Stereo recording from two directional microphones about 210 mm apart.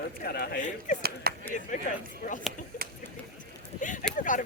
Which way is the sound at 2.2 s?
35° left (ahead or behind).